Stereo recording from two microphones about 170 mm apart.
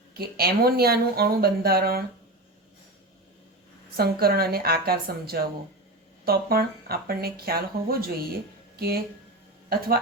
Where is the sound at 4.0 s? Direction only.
65° right (ahead or behind).